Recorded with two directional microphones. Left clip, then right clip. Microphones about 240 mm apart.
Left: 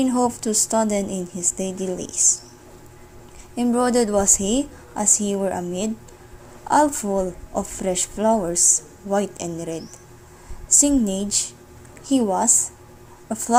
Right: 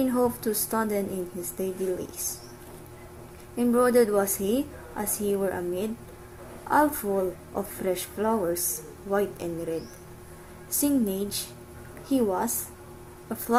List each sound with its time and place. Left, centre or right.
0.0 s a woman's voice: left
3.5 s a woman's voice: left